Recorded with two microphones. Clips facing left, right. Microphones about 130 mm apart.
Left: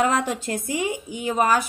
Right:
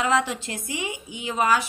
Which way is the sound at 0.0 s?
45° left (ahead or behind).